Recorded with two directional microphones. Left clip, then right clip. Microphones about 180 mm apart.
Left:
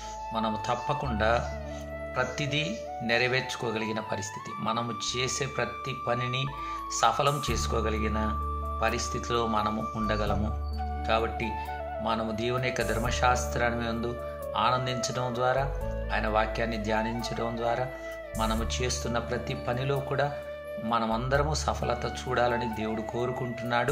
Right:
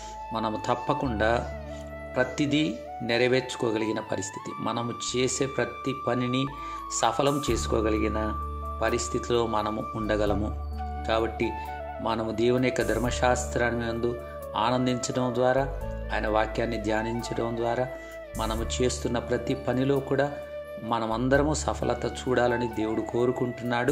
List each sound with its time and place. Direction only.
0.3 s speech: 50° right (ahead or behind)